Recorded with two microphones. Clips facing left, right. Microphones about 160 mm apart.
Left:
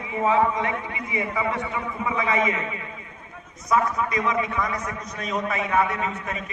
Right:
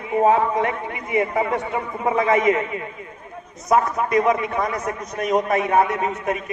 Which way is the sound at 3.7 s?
45° right (ahead or behind).